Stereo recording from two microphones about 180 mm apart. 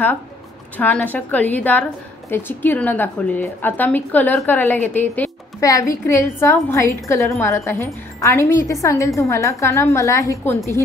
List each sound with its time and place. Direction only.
0.7 s a woman's voice: 10° left (ahead or behind)